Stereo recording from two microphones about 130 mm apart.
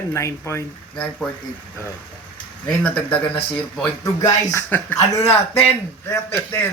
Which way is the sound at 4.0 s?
25° left (ahead or behind).